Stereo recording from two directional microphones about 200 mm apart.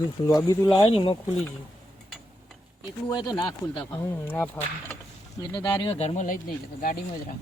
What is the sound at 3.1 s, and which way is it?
Speech, 20° left (ahead or behind).